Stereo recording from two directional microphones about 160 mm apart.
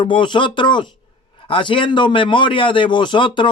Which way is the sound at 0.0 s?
30° left (ahead or behind).